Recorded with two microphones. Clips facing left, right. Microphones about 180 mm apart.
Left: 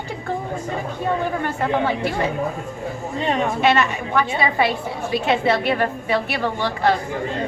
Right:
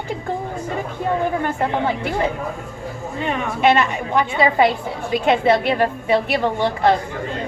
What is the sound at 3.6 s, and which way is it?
A woman's voice, 15° right (ahead or behind).